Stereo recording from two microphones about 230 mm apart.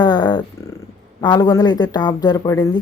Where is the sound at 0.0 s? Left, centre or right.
Centre.